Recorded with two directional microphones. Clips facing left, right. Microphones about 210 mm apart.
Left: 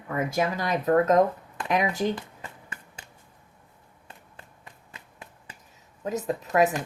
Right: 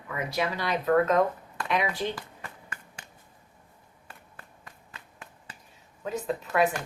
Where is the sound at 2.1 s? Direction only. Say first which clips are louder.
Left 3 dB; 25° left (ahead or behind).